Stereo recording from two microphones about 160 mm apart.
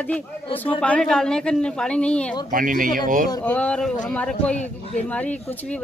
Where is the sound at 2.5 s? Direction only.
55° right (ahead or behind).